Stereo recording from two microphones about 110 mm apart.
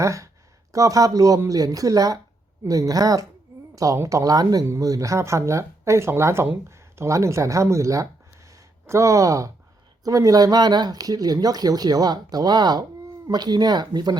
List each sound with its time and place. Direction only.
0.0 s speech: 30° right (ahead or behind)